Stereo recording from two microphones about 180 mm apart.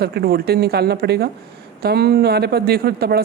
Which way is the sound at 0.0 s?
60° right (ahead or behind).